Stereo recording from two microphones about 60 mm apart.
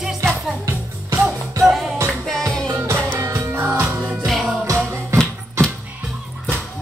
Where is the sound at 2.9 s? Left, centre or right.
Right.